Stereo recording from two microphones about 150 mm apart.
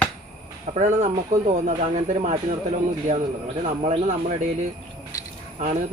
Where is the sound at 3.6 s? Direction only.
45° right (ahead or behind).